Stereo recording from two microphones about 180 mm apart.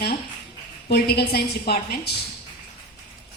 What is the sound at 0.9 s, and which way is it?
A woman's voice, 60° left (ahead or behind).